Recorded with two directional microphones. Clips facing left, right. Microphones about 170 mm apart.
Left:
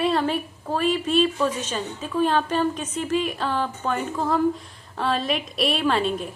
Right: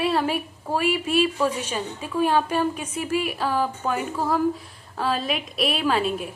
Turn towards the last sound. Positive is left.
turn(degrees=-5)  # may be behind; listen again after turning